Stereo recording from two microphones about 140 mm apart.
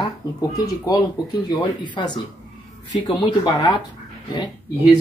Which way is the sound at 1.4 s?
35° left (ahead or behind).